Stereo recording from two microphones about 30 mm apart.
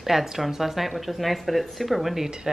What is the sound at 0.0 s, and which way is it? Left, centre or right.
Speech, centre.